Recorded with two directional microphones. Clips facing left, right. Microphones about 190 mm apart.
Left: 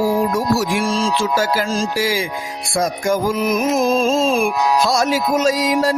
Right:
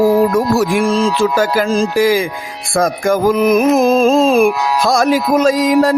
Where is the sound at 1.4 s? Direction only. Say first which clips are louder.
Right 5 dB; 55° right (ahead or behind).